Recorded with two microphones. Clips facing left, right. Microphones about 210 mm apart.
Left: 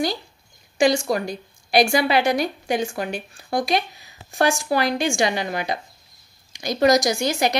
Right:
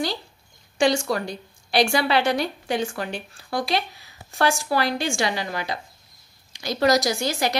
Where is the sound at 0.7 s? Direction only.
10° left (ahead or behind).